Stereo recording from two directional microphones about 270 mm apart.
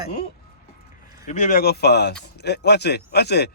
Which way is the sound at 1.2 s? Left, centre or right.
Left.